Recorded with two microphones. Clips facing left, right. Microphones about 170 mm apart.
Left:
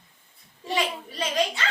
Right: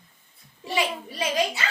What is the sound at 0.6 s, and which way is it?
Speech, 10° right (ahead or behind).